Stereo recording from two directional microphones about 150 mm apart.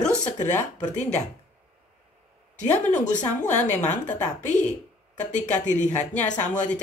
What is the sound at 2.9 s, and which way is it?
Speech, 55° left (ahead or behind).